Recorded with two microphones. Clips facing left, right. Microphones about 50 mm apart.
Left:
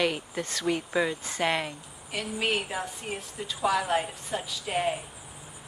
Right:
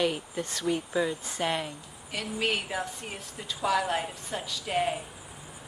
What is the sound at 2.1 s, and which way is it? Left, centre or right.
A woman's voice, centre.